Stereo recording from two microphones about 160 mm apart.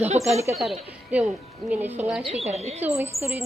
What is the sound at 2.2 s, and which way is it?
Speech, 40° right (ahead or behind).